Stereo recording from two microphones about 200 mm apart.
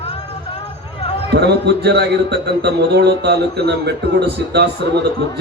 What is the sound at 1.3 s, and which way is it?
A man's voice, 55° right (ahead or behind).